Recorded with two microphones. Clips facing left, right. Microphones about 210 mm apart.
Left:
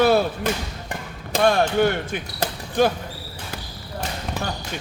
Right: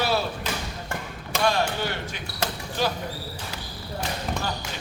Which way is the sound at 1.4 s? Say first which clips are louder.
Left 7 dB; 55° left (ahead or behind).